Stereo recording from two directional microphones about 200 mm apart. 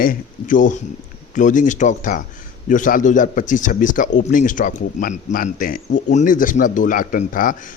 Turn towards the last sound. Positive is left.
turn(degrees=40)  # may be behind; listen again after turning